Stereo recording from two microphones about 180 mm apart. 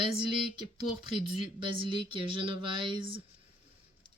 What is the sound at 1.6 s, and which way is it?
Speech, 30° right (ahead or behind).